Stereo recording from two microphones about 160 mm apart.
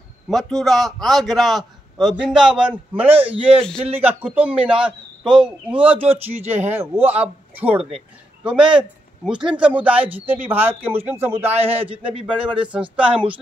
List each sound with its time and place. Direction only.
0.3 s a man's voice: centre (ahead or behind)
11.8 s a man's voice: 35° right (ahead or behind)
12.4 s a man's voice: 5° right (ahead or behind)